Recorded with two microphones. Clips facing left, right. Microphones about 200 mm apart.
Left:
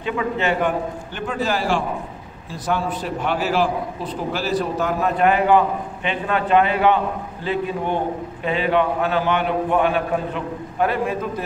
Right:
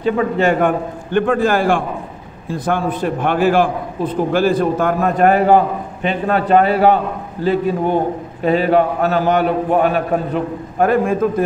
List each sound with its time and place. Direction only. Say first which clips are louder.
0.0 s a man's voice: right 7 dB; 45° right (ahead or behind)